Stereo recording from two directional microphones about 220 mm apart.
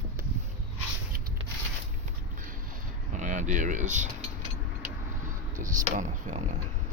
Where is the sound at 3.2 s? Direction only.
35° right (ahead or behind).